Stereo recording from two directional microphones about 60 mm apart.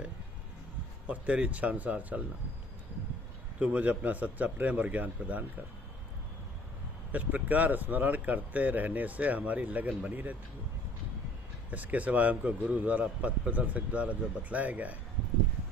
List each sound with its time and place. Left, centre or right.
1.0 s a man's voice: right
3.5 s a man's voice: right
7.1 s a man's voice: right
11.7 s a man's voice: right